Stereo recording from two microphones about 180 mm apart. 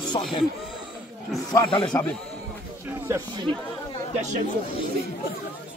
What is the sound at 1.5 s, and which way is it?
Speech, 25° left (ahead or behind).